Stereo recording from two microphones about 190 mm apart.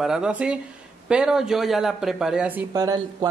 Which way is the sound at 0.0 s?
5° right (ahead or behind).